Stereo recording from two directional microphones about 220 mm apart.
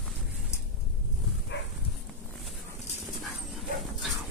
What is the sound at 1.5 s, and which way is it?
Dog, 55° left (ahead or behind).